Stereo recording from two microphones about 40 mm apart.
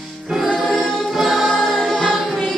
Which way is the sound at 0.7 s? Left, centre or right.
Centre.